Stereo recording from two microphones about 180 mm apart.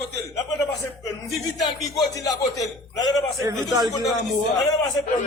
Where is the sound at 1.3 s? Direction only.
Centre (ahead or behind).